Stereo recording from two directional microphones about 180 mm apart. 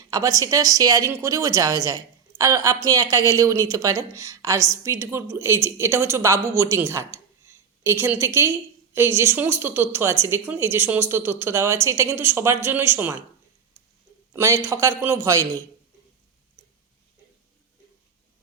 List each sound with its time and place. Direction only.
0.1 s a woman's voice: 20° right (ahead or behind)
14.3 s a woman's voice: 15° right (ahead or behind)